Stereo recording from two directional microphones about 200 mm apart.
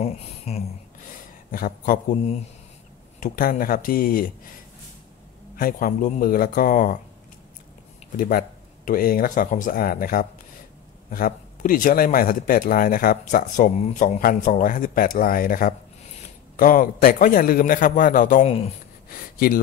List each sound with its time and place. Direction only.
0.0 s speech: 30° left (ahead or behind)
1.5 s a man's voice: 45° left (ahead or behind)
3.2 s a man's voice: 45° left (ahead or behind)
5.6 s a man's voice: 45° left (ahead or behind)
8.2 s a man's voice: 45° left (ahead or behind)
19.0 s a sound: 45° left (ahead or behind)